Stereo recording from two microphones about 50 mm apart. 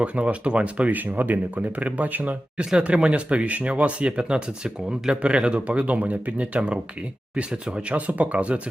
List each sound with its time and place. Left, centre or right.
0.0 s speech: right